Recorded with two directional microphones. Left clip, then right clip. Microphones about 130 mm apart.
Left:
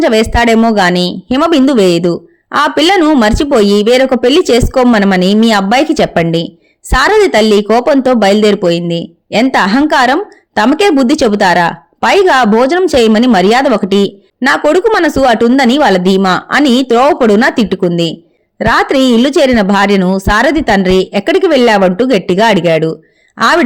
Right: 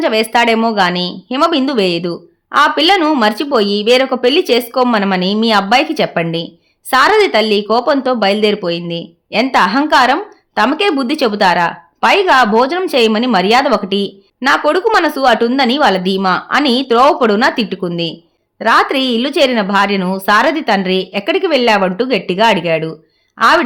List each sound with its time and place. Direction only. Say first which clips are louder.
0.0 s a woman's voice: left 3 dB; 35° left (ahead or behind)